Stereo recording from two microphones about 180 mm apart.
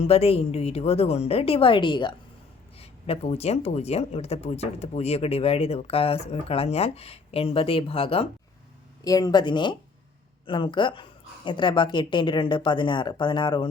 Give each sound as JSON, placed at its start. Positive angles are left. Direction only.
{"t": 0.0, "sound": "speech", "side_deg": 35}
{"t": 9.0, "sound": "a woman's voice", "side_deg": 20}